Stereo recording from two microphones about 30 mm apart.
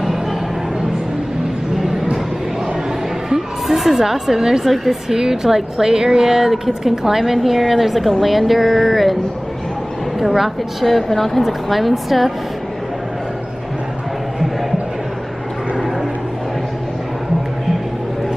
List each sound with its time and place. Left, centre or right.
3.3 s a sound: centre
5.1 s a woman's voice: centre
10.1 s a woman's voice: centre